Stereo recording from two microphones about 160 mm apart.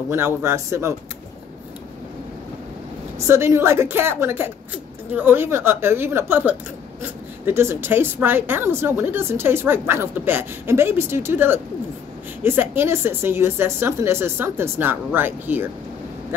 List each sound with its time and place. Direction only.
0.1 s a woman's voice: 15° right (ahead or behind)
3.3 s a woman's voice: 15° right (ahead or behind)